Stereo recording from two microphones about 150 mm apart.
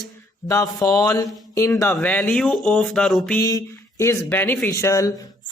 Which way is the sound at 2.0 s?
10° left (ahead or behind).